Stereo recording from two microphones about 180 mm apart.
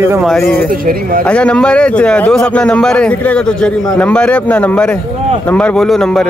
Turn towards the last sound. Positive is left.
turn(degrees=5)  # may be behind; listen again after turning